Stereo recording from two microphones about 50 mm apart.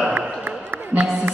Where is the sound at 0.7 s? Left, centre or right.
Right.